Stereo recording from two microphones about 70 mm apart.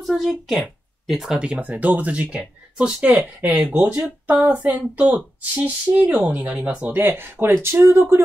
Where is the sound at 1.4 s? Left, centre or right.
Centre.